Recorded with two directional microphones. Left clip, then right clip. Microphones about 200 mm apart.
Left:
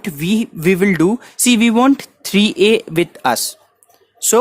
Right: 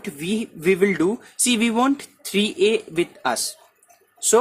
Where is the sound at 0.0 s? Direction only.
50° left (ahead or behind).